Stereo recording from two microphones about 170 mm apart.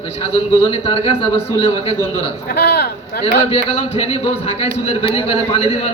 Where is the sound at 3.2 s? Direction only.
35° left (ahead or behind).